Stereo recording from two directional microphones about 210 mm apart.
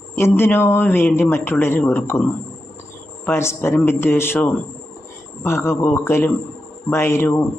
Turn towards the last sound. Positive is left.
turn(degrees=10)  # may be behind; listen again after turning